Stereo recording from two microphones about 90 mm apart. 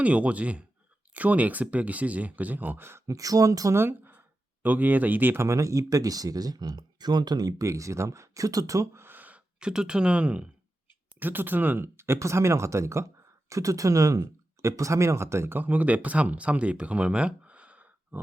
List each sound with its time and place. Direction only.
0.0 s speech: 15° right (ahead or behind); by 3.8 s 40° right (ahead or behind)
3.8 s speech: 25° right (ahead or behind)